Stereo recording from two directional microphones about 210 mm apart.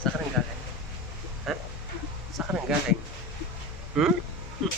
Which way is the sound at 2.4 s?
5° right (ahead or behind).